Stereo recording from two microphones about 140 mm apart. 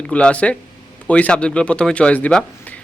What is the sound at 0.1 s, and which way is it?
Speech, 10° left (ahead or behind).